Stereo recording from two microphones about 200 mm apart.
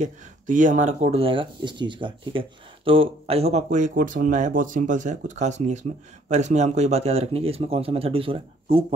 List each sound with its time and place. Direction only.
0.0 s speech: 40° right (ahead or behind)